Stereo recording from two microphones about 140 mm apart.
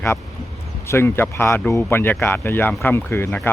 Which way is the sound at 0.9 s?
15° left (ahead or behind).